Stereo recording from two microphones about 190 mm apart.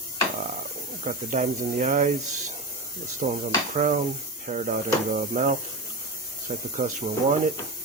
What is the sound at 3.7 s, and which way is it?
Speech, 40° right (ahead or behind).